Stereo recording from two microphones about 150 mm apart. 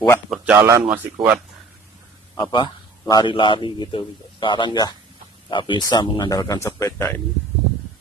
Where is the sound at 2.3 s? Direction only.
30° left (ahead or behind).